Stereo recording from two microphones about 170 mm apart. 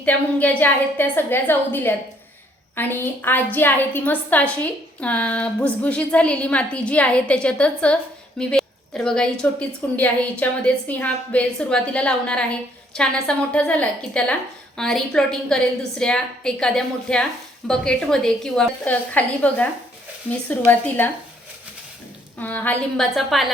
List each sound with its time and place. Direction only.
0.0 s a woman's voice: 10° left (ahead or behind)
22.4 s a woman's voice: 10° left (ahead or behind)